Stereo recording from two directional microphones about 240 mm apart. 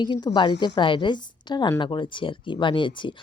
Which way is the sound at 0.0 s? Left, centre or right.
Centre.